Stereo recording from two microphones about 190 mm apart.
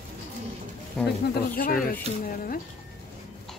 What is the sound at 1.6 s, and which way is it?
Speech, 50° left (ahead or behind).